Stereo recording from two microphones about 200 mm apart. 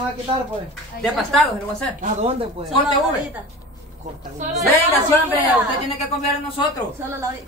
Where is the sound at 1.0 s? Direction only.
Centre (ahead or behind).